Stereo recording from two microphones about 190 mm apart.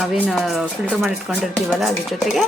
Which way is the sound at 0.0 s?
Centre (ahead or behind).